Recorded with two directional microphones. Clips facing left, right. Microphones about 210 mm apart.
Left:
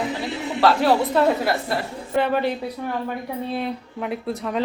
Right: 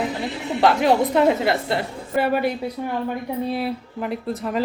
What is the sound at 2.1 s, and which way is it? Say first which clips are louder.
Speech: even; 5° right (ahead or behind).